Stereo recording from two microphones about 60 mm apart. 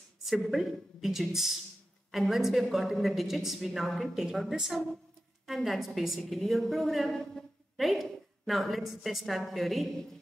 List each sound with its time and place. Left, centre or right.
0.2 s a woman's voice: centre